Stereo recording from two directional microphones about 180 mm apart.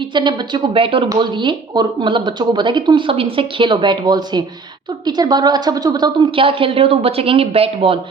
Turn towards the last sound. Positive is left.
turn(degrees=-30)  # may be behind; listen again after turning